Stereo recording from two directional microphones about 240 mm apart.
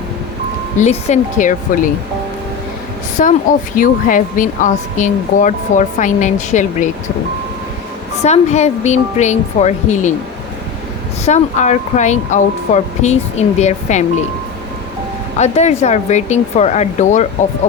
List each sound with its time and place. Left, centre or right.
0.8 s speech: left
3.2 s speech: left
8.2 s speech: left
11.3 s speech: left
15.4 s speech: left